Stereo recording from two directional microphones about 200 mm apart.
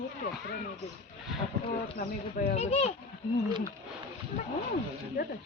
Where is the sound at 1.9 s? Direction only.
40° left (ahead or behind).